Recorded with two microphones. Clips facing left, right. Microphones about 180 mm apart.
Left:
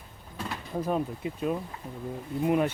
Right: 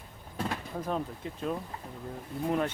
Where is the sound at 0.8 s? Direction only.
10° left (ahead or behind).